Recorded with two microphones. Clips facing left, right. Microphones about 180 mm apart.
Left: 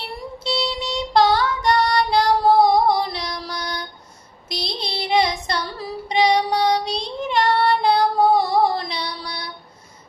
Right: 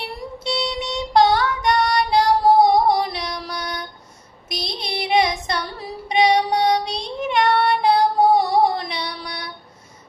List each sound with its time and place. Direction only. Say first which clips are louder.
0.4 s child singing: even; 15° right (ahead or behind)
8.4 s music: right 1 dB; 15° right (ahead or behind)